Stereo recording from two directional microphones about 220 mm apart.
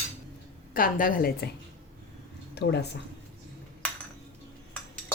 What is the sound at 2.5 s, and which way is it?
Speech, 50° left (ahead or behind).